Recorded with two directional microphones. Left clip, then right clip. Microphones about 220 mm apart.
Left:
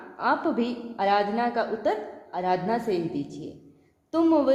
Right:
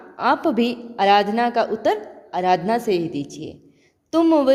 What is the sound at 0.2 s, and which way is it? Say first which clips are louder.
A woman's voice: right 6 dB; 50° right (ahead or behind).